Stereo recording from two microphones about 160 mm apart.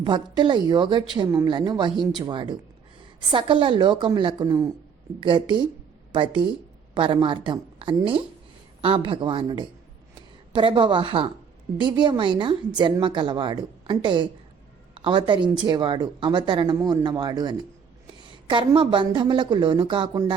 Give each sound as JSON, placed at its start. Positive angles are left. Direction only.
{"t": 0.0, "sound": "a woman's voice", "side_deg": -30}